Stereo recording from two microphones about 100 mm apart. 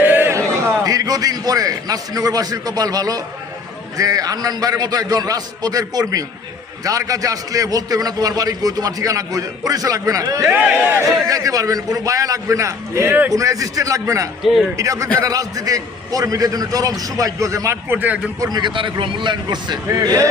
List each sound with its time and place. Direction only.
0.0 s a man's voice: 20° right (ahead or behind)
10.5 s speech: 10° right (ahead or behind)
11.0 s a man's voice: 35° right (ahead or behind)
14.4 s a man's voice: centre (ahead or behind)
14.8 s a man's voice: 35° right (ahead or behind); by 18.2 s 20° right (ahead or behind)
18.3 s a man's voice: 40° right (ahead or behind)